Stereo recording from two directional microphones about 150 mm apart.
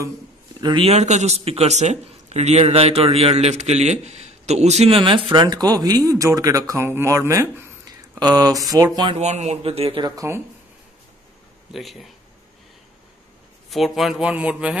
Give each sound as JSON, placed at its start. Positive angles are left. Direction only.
{"t": 0.6, "sound": "speech", "side_deg": -30}
{"t": 0.8, "sound": "a man's voice", "side_deg": -50}
{"t": 9.2, "sound": "a man's voice", "side_deg": -50}
{"t": 11.7, "sound": "speech", "side_deg": 0}
{"t": 13.7, "sound": "speech", "side_deg": 0}